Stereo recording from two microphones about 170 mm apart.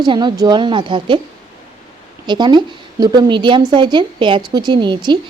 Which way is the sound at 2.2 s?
25° right (ahead or behind).